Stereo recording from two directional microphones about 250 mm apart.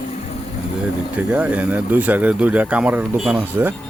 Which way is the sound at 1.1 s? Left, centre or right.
Centre.